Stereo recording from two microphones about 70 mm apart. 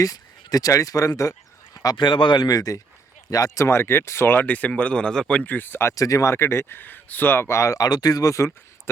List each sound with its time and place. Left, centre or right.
0.0 s speech: left
2.6 s speech: left; by 5.2 s centre
5.3 s speech: left
5.9 s speech: left
7.8 s speech: left